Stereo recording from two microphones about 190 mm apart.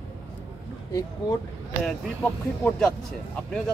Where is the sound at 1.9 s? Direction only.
5° left (ahead or behind).